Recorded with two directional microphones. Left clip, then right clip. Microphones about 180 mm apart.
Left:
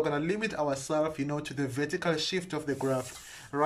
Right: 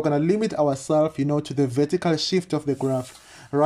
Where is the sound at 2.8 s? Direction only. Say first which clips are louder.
Right 5 dB; 25° right (ahead or behind).